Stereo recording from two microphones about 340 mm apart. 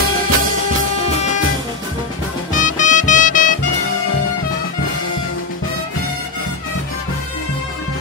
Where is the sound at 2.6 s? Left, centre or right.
Left.